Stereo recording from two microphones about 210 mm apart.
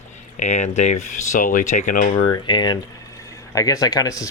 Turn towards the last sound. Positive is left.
turn(degrees=15)  # may be behind; listen again after turning